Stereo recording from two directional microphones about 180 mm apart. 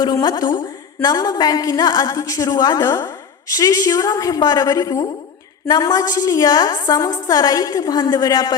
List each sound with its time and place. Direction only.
0.0 s a woman's voice: 25° left (ahead or behind)